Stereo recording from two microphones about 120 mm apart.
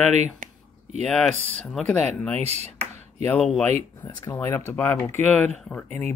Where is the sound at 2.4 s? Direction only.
60° right (ahead or behind).